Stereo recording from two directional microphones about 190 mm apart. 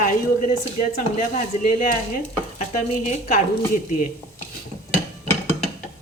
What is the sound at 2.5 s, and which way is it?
Stir, 40° left (ahead or behind).